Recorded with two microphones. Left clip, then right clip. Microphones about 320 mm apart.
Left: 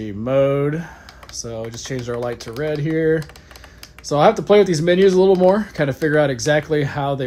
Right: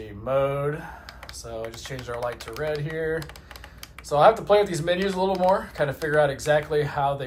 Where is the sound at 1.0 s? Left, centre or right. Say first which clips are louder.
Left 2 dB; centre.